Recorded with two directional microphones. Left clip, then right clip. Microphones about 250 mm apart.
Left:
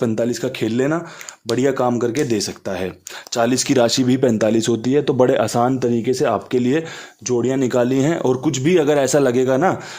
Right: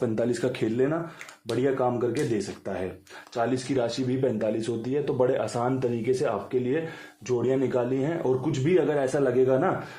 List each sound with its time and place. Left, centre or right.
0.0 s speech: left
1.5 s speech: left